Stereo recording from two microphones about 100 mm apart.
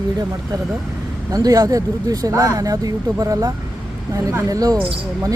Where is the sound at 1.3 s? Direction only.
35° right (ahead or behind).